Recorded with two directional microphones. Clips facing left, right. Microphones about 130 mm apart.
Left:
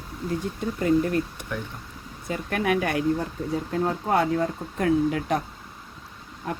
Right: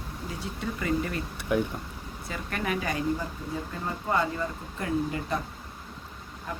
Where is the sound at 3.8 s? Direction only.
80° left.